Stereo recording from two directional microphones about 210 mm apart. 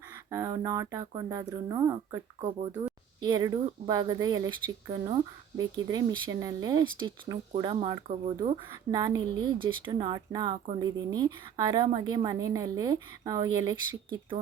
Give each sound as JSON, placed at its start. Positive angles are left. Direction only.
{"t": 0.3, "sound": "speech", "side_deg": -15}